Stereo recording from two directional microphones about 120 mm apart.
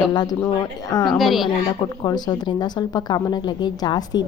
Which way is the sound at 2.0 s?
35° left (ahead or behind).